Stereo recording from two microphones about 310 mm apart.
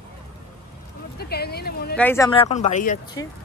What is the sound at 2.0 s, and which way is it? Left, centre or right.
Speech, centre.